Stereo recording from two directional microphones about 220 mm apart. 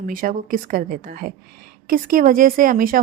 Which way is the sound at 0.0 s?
40° right (ahead or behind).